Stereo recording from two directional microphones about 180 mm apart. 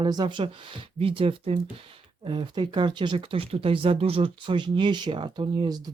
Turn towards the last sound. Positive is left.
turn(degrees=-20)  # may be behind; listen again after turning